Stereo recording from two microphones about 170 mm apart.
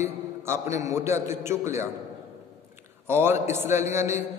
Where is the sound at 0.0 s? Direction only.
15° right (ahead or behind).